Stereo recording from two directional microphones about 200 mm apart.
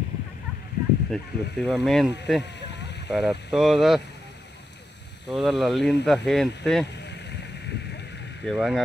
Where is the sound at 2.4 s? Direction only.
60° left (ahead or behind).